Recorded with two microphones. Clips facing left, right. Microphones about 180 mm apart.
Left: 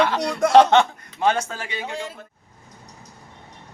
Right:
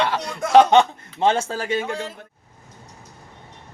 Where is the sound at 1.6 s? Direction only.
45° right (ahead or behind).